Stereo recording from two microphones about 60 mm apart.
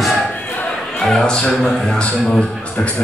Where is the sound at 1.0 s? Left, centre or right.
Centre.